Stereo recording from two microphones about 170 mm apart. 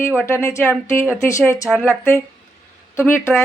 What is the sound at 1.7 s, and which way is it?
Speech, 10° right (ahead or behind).